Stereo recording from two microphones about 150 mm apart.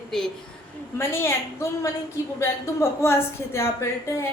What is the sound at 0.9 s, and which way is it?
A woman's voice, 15° left (ahead or behind).